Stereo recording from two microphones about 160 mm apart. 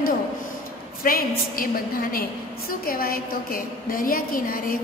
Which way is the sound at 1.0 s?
65° left (ahead or behind).